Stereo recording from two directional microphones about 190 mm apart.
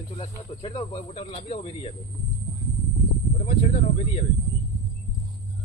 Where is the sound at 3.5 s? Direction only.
35° left (ahead or behind).